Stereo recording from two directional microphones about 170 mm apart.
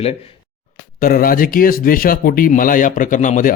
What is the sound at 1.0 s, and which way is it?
Speech, 55° left (ahead or behind).